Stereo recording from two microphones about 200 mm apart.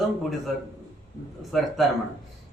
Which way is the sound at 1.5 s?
Centre (ahead or behind).